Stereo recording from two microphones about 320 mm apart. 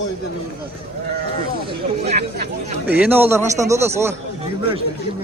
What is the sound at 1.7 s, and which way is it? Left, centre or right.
Speech, centre.